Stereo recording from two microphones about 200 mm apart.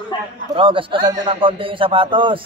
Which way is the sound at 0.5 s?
25° right (ahead or behind).